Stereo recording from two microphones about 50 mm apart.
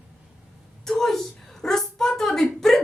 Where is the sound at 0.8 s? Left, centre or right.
Centre.